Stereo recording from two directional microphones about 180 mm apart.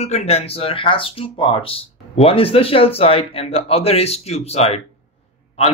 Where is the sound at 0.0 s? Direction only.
35° left (ahead or behind).